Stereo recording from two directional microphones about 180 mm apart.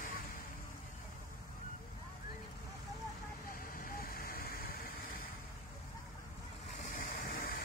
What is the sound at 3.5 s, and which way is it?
Vehicle, 55° left (ahead or behind).